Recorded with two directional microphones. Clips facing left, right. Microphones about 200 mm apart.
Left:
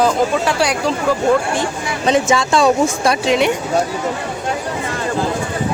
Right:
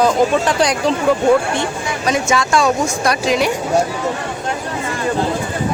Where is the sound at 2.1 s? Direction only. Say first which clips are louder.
Left 2 dB; 25° left (ahead or behind).